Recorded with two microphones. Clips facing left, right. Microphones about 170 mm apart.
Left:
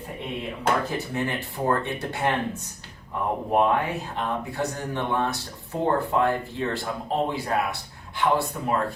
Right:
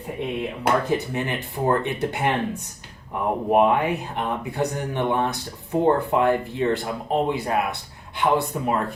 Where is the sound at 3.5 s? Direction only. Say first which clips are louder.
Right 4 dB; 15° right (ahead or behind).